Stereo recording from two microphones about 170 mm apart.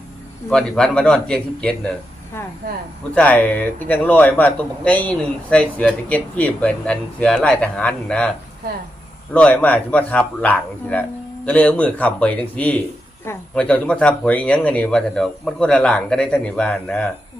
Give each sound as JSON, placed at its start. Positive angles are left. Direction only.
{"t": 0.5, "sound": "a man's voice", "side_deg": 5}
{"t": 2.6, "sound": "speech", "side_deg": -60}
{"t": 3.2, "sound": "a man's voice", "side_deg": 10}
{"t": 9.3, "sound": "a man's voice", "side_deg": 10}